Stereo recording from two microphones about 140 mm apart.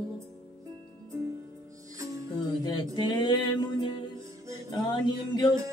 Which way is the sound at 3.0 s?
30° left (ahead or behind).